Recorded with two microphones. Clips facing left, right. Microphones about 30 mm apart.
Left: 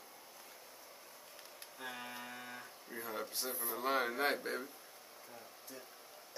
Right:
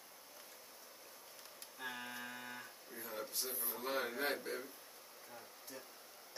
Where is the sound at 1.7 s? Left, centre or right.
Centre.